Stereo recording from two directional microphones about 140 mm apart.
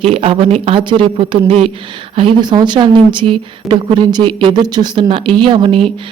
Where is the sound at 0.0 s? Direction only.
45° right (ahead or behind).